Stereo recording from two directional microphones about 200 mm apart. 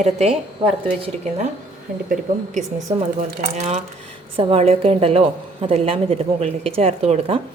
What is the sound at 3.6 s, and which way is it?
A woman's voice, 35° right (ahead or behind).